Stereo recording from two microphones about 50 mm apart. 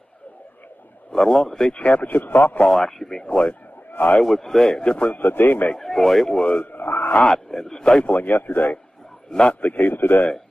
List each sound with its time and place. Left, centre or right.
1.1 s a man's voice: centre
1.8 s speech: left
2.7 s a man's voice: centre
3.2 s a man's voice: left
4.2 s a man's voice: centre; by 5.2 s left
5.2 s speech: left
5.7 s a man's voice: centre
6.3 s speech: left
6.7 s a sound: left
7.3 s a man's voice: centre
8.0 s speech: left
9.3 s speech: left
9.6 s speech: left